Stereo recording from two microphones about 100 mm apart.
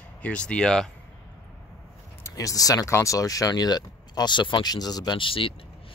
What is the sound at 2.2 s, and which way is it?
Speech, 35° left (ahead or behind).